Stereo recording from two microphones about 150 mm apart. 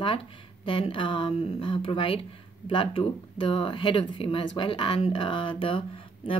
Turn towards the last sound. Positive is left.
turn(degrees=35)  # may be behind; listen again after turning